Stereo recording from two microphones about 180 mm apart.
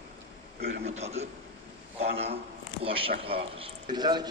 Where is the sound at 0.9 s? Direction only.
35° right (ahead or behind).